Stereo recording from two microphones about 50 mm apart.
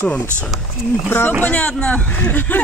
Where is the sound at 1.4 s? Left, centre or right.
Left.